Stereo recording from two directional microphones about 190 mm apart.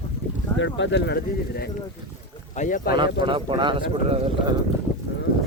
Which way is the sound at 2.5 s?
40° left (ahead or behind).